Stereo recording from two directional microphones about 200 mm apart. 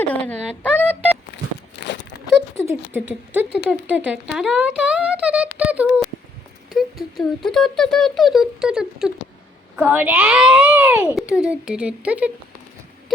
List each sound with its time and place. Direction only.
0.0 s speech: 10° left (ahead or behind)
1.8 s a sound: 60° left (ahead or behind)
2.6 s speech: 10° right (ahead or behind)